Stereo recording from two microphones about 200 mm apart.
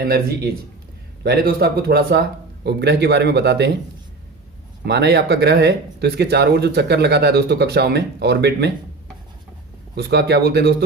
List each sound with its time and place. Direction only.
0.0 s speech: 50° right (ahead or behind)
4.9 s speech: 55° right (ahead or behind)
9.9 s speech: 55° right (ahead or behind)